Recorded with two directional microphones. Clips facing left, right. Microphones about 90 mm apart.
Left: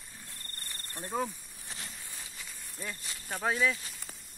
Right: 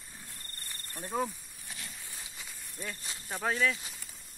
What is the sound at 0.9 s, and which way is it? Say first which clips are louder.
Speech: right 1 dB; centre (ahead or behind).